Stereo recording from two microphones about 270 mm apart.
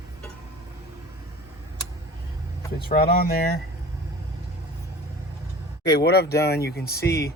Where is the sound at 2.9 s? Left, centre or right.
Left.